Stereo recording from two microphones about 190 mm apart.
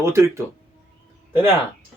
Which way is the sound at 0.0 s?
15° right (ahead or behind).